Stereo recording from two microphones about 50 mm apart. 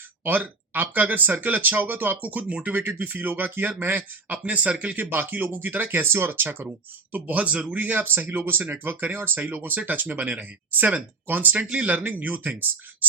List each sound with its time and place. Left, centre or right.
0.3 s speech: right
2.7 s speech: right
9.6 s speech: right
11.6 s speech: right